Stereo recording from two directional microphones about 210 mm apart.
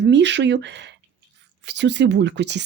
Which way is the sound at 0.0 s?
55° right (ahead or behind).